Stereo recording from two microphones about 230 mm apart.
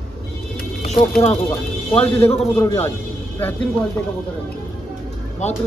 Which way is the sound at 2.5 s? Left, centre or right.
Centre.